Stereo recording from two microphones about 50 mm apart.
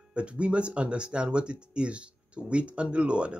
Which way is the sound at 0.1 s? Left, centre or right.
Right.